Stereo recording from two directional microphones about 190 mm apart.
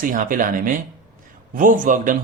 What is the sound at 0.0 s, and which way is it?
Speech, 45° right (ahead or behind).